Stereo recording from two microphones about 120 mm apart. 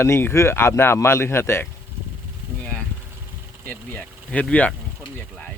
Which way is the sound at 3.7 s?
10° left (ahead or behind).